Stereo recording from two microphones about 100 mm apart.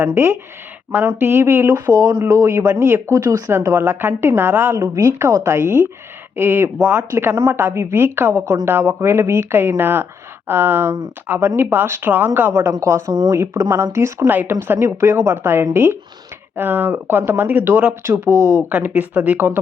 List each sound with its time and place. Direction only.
0.0 s speech: 25° right (ahead or behind)
1.7 s speech: 35° right (ahead or behind); by 19.5 s 15° right (ahead or behind)